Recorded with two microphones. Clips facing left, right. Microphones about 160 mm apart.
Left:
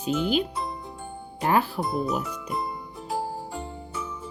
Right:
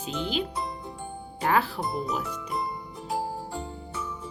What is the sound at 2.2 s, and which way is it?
Music, centre (ahead or behind).